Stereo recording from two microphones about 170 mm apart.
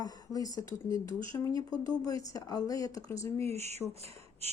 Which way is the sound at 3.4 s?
40° right (ahead or behind).